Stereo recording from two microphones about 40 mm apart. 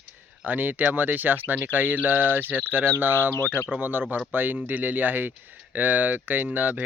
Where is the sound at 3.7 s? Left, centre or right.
Right.